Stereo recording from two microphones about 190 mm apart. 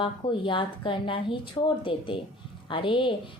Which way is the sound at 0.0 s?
25° left (ahead or behind).